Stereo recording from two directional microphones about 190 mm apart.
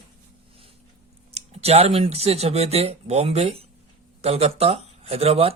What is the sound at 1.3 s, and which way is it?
Speech, 35° right (ahead or behind).